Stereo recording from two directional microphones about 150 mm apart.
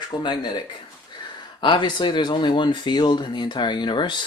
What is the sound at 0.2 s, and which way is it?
Speech, 30° left (ahead or behind).